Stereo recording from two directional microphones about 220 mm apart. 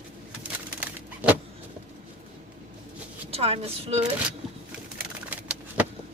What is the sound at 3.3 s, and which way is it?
Speech, 25° right (ahead or behind).